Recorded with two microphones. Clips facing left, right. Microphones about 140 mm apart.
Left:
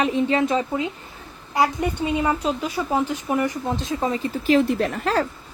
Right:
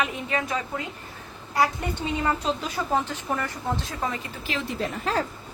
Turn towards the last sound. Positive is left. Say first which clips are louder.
# left 6 dB
turn(degrees=70)  # may be behind; listen again after turning